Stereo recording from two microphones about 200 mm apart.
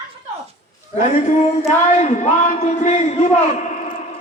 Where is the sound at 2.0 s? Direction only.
35° left (ahead or behind).